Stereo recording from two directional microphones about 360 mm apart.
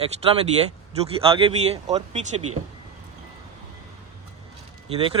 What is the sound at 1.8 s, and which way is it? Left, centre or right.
Speech, centre.